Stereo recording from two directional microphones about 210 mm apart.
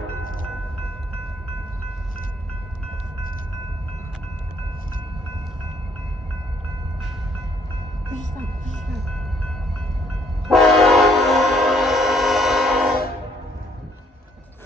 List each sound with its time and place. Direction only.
0.2 s train: 40° left (ahead or behind)
8.1 s music: 35° left (ahead or behind)
10.5 s train: centre (ahead or behind)